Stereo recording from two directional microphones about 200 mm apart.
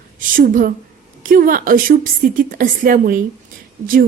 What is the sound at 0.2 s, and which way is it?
Speech, 45° right (ahead or behind).